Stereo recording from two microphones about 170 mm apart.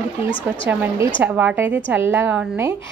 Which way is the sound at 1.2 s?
10° right (ahead or behind).